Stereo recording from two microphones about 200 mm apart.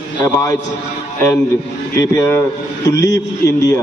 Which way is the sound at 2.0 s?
15° left (ahead or behind).